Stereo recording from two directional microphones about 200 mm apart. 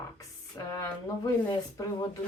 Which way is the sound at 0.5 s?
15° left (ahead or behind).